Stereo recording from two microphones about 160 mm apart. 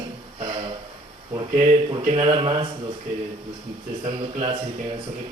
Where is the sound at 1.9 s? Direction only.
30° right (ahead or behind).